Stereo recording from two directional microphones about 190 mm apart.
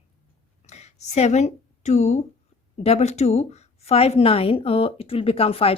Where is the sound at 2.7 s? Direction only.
30° left (ahead or behind).